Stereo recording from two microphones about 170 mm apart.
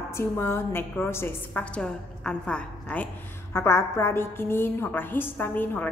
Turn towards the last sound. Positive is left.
turn(degrees=10)  # may be behind; listen again after turning